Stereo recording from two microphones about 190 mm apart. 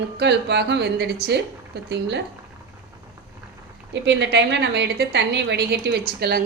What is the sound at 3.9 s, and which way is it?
A woman's voice, 65° right (ahead or behind).